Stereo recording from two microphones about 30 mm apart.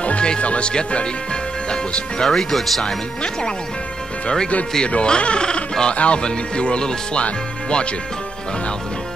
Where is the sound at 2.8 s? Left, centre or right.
Left.